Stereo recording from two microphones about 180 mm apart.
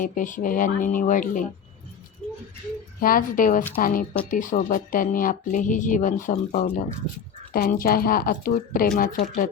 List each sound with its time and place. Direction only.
0.0 s speech: 50° left (ahead or behind)
3.0 s speech: 50° left (ahead or behind)
7.5 s speech: 50° left (ahead or behind)